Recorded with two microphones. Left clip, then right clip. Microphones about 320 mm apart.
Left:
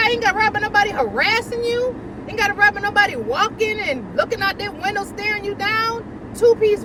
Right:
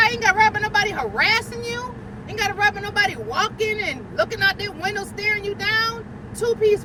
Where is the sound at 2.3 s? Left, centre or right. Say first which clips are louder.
Left 4 dB; centre.